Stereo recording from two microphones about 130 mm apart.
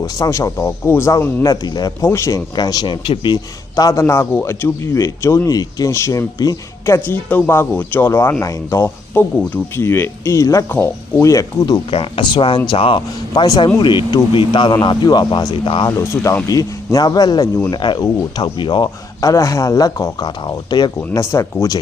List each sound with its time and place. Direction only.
0.0 s a man's voice: 25° left (ahead or behind)
11.9 s speech: 45° left (ahead or behind)
16.2 s a man's voice: 25° left (ahead or behind)